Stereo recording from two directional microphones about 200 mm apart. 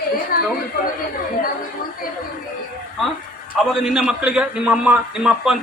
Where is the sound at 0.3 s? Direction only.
45° left (ahead or behind).